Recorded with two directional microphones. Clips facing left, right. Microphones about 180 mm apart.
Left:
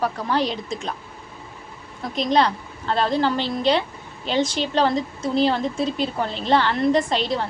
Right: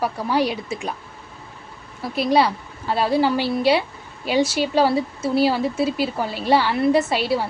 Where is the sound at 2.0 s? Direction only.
10° right (ahead or behind).